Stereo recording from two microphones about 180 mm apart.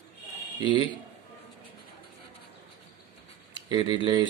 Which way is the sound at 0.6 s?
25° right (ahead or behind).